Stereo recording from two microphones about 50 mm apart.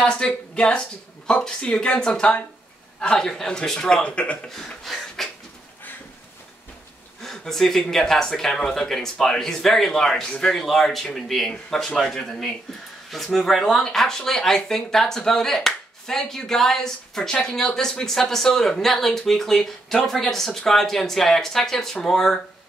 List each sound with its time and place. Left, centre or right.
0.0 s speech: left
4.1 s speech: left
4.8 s a sound: centre
7.2 s speech: centre